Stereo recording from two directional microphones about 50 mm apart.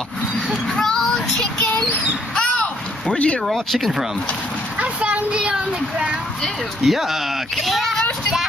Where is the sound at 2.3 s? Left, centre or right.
Left.